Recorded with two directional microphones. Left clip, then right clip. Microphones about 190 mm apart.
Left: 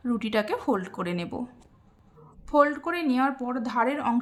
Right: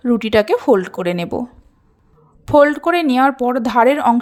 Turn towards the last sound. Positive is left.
turn(degrees=-40)  # may be behind; listen again after turning